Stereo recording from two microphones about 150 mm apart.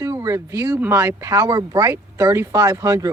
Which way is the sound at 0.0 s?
20° right (ahead or behind).